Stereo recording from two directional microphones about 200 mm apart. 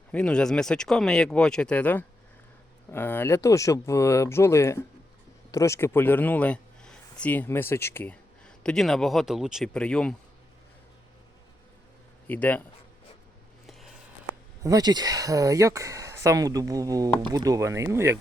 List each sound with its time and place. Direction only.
0.1 s speech: 5° left (ahead or behind)
12.3 s speech: 10° left (ahead or behind)
13.7 s a sound: centre (ahead or behind)
14.6 s speech: 20° right (ahead or behind)